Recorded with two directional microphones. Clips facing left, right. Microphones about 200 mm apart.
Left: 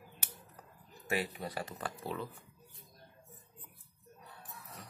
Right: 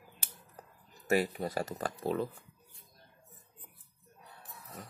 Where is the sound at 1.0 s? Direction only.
45° right (ahead or behind).